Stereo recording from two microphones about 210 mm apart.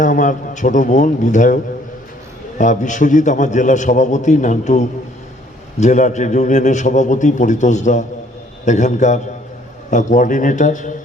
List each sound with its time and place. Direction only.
0.0 s a man's voice: 40° left (ahead or behind)
2.6 s a man's voice: 35° left (ahead or behind)